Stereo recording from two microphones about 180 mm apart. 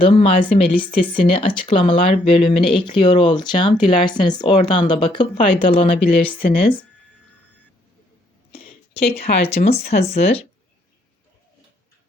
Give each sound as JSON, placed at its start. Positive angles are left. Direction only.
{"t": 0.0, "sound": "speech", "side_deg": 30}
{"t": 8.5, "sound": "a sound", "side_deg": 30}
{"t": 10.2, "sound": "speech", "side_deg": 35}